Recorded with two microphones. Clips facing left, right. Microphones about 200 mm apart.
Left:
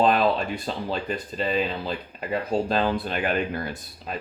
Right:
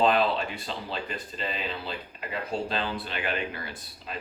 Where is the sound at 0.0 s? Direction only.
45° left (ahead or behind).